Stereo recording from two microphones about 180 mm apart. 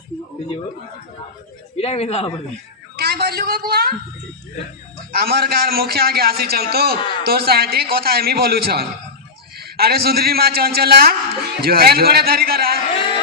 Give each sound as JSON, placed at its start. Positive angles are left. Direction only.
{"t": 1.7, "sound": "speech", "side_deg": 35}
{"t": 2.9, "sound": "a man's voice", "side_deg": -60}
{"t": 5.1, "sound": "a man's voice", "side_deg": -60}